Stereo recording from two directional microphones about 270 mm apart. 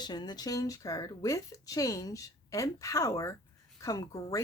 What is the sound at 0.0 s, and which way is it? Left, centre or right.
A woman's voice, centre.